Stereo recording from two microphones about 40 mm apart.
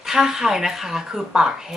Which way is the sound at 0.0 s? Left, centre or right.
Centre.